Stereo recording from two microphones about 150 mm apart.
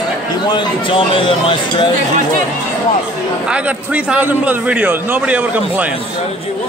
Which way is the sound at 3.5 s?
10° right (ahead or behind).